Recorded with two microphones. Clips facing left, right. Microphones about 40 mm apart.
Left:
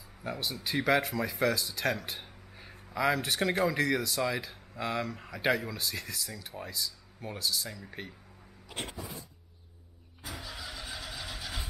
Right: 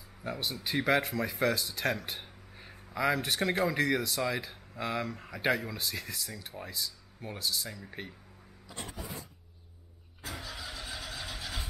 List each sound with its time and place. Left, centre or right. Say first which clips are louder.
0.2 s speech: even; centre
8.6 s a sound: left 4 dB; left
10.2 s vehicle: right 1 dB; centre